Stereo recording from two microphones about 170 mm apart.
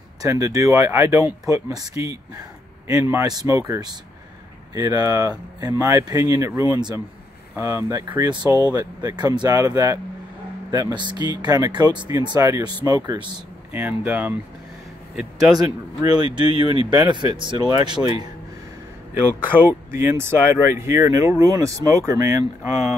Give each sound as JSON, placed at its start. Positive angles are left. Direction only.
{"t": 0.2, "sound": "speech", "side_deg": -20}
{"t": 13.7, "sound": "a man's voice", "side_deg": -10}
{"t": 15.6, "sound": "speech", "side_deg": -20}
{"t": 19.9, "sound": "speech", "side_deg": -15}